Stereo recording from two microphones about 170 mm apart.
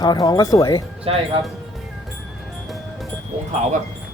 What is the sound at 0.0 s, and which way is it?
Speech, 25° left (ahead or behind).